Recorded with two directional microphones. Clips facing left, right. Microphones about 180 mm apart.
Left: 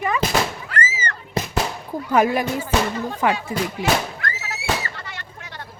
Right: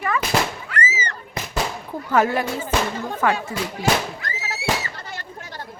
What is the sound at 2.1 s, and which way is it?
Speech, 15° left (ahead or behind).